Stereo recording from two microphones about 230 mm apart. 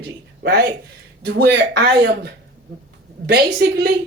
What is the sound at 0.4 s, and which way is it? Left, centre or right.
Speech, right.